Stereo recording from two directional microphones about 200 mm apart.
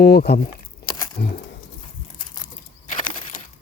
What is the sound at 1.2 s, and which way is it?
Speech, 45° left (ahead or behind).